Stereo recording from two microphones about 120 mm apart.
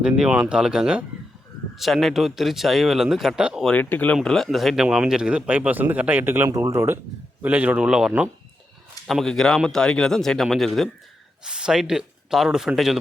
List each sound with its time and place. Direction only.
0.2 s speech: 5° right (ahead or behind)
3.6 s speech: 10° left (ahead or behind)